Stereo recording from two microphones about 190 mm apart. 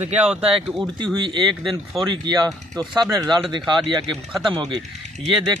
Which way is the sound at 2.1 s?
20° right (ahead or behind).